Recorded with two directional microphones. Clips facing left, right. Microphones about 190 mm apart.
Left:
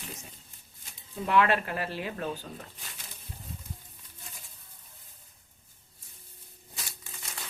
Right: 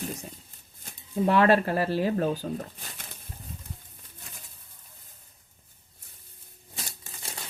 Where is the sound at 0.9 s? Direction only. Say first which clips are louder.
Right 7 dB; 40° right (ahead or behind).